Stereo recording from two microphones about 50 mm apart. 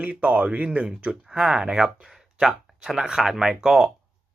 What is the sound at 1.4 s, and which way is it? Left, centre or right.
A man's voice, centre.